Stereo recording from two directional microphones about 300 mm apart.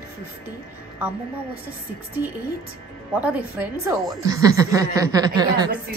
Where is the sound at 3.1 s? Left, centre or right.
Centre.